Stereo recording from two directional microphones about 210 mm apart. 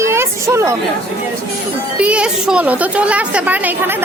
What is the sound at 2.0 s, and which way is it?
A woman's voice, 5° right (ahead or behind).